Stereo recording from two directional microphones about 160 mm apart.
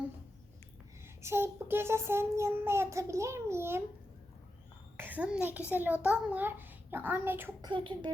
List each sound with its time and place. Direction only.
1.0 s child singing: 15° right (ahead or behind)
4.9 s child singing: 10° right (ahead or behind)
7.6 s speech: 30° right (ahead or behind)